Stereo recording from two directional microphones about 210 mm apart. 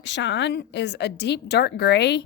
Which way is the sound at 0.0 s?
60° left (ahead or behind).